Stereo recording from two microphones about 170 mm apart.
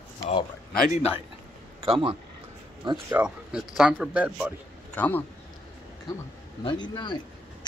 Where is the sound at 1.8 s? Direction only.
35° right (ahead or behind).